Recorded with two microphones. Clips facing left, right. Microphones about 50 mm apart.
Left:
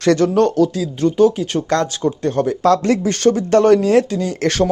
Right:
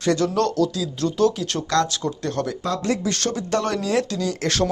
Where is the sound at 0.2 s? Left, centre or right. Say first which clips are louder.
Left 6 dB; left.